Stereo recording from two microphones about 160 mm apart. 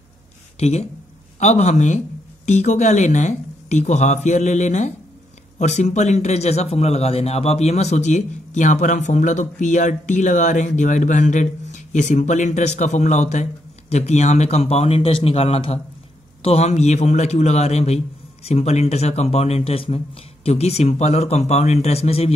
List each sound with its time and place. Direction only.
0.6 s a man's voice: 45° left (ahead or behind)